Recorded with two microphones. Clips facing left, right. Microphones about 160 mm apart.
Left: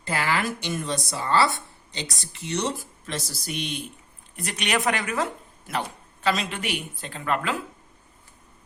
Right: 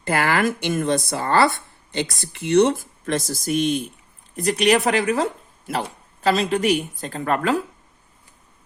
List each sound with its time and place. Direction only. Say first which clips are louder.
0.0 s a woman's voice: right 6 dB; 55° right (ahead or behind)